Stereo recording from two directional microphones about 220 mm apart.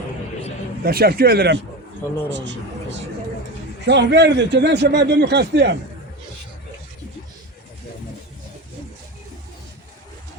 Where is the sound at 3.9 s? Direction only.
50° right (ahead or behind).